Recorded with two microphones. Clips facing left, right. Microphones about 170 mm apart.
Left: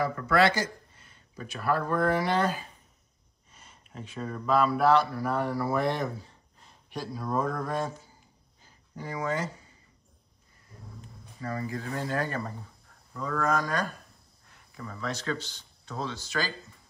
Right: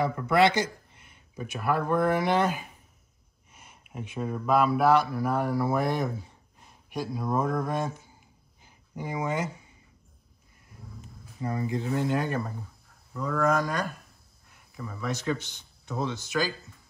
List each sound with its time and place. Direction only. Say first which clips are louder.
0.0 s speech: right 2 dB; 20° right (ahead or behind)
11.4 s speech: right 4 dB; 20° right (ahead or behind)
13.1 s speech: right 3 dB; 5° right (ahead or behind)